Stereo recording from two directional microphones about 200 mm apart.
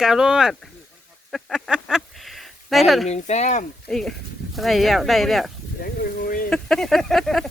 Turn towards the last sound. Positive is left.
turn(degrees=0)  # may be behind; listen again after turning